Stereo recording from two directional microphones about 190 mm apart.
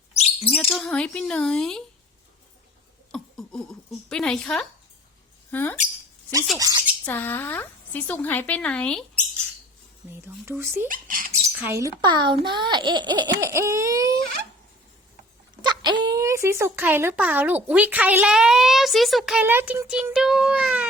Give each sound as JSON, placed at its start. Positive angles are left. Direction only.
{"t": 0.1, "sound": "a sound", "side_deg": 35}
{"t": 0.7, "sound": "speech", "side_deg": 0}
{"t": 3.1, "sound": "speech", "side_deg": 5}
{"t": 6.6, "sound": "speech", "side_deg": -20}
{"t": 7.0, "sound": "speech", "side_deg": 10}
{"t": 10.2, "sound": "speech", "side_deg": -10}
{"t": 10.8, "sound": "speech", "side_deg": -45}
{"t": 11.3, "sound": "speech", "side_deg": -15}
{"t": 15.6, "sound": "a sound", "side_deg": -20}
{"t": 16.0, "sound": "speech", "side_deg": -15}